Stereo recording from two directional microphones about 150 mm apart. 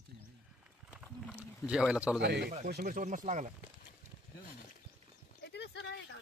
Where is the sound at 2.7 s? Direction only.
75° right (ahead or behind); by 3.5 s 55° right (ahead or behind).